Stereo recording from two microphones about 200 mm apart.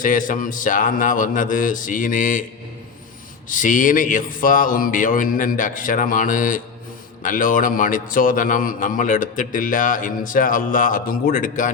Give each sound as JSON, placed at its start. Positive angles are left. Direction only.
{"t": 0.0, "sound": "a man's voice", "side_deg": 40}
{"t": 3.5, "sound": "a man's voice", "side_deg": 40}